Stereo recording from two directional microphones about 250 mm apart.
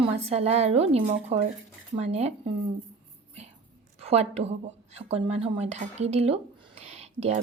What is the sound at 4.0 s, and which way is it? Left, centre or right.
A woman's voice, right.